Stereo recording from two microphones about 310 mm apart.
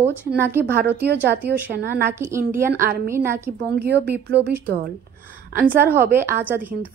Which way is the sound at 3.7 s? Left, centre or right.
Right.